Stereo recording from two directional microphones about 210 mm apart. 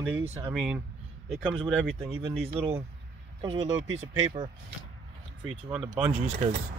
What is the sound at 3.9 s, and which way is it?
Speech, 35° right (ahead or behind).